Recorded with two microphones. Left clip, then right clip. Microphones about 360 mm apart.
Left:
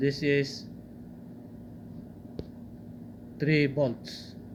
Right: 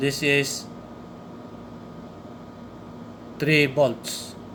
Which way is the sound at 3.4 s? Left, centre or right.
Centre.